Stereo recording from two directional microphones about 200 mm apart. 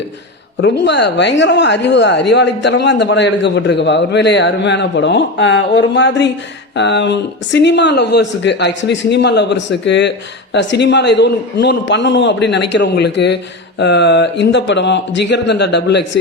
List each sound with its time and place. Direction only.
0.6 s speech: 60° left (ahead or behind)